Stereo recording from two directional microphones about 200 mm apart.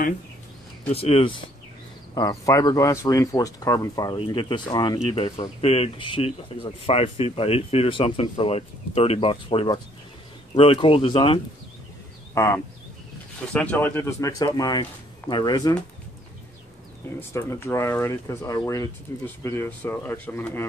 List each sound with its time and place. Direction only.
0.9 s speech: 30° left (ahead or behind)
2.1 s speech: 15° left (ahead or behind)
12.4 s speech: 15° left (ahead or behind)
17.3 s speech: 15° left (ahead or behind)